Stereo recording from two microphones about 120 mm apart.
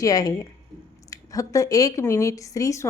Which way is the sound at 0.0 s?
30° left (ahead or behind).